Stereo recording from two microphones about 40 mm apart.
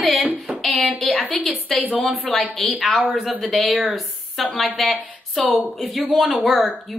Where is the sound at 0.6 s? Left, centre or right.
Centre.